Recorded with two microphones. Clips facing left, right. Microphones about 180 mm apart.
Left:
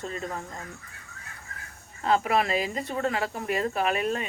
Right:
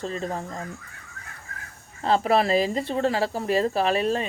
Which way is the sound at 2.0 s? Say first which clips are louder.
Right 3 dB; 35° right (ahead or behind).